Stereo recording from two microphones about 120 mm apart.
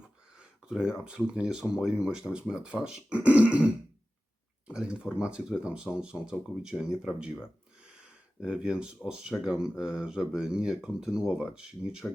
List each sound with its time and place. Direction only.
0.3 s speech: 5° right (ahead or behind)
4.7 s speech: 5° right (ahead or behind)
8.0 s a sound: 5° right (ahead or behind)
9.0 s speech: 5° right (ahead or behind)